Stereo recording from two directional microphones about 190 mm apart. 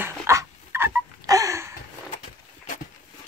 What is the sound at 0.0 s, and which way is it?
Dog, 15° right (ahead or behind).